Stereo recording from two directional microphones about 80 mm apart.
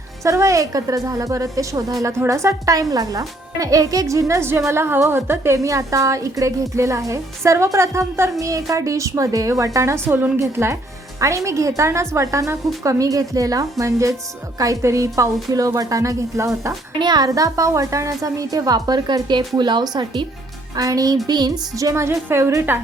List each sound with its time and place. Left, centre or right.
0.2 s a woman's voice: right
17.0 s a woman's voice: right
17.2 s a woman's voice: right
20.7 s a woman's voice: right
21.2 s a woman's voice: right